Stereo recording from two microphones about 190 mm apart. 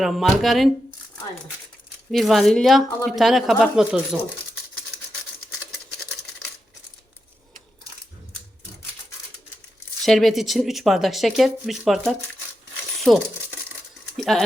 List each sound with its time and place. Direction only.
0.0 s speech: centre (ahead or behind)
2.1 s speech: centre (ahead or behind)
10.0 s speech: centre (ahead or behind)